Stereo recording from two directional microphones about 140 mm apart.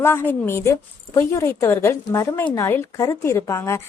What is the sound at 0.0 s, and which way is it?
A woman's voice, 15° left (ahead or behind).